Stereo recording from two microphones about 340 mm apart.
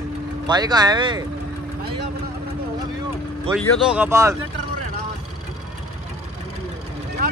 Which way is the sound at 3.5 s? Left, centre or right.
Centre.